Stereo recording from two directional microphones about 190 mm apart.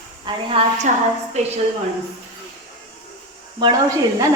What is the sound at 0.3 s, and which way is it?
A woman's voice, 30° right (ahead or behind).